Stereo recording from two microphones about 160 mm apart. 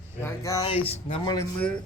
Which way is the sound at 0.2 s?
15° left (ahead or behind).